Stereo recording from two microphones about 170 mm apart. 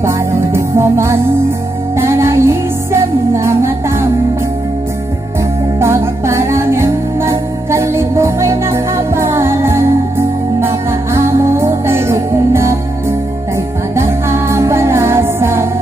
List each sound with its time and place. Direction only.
0.0 s music: 15° right (ahead or behind)
5.8 s music: 15° right (ahead or behind)
13.9 s music: 15° right (ahead or behind)